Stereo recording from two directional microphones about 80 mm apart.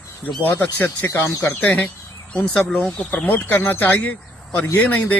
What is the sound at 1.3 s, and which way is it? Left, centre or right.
Speech, left.